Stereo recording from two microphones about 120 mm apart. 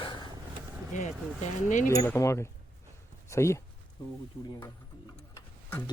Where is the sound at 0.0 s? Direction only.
40° left (ahead or behind).